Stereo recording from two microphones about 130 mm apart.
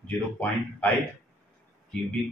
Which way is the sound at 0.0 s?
10° left (ahead or behind).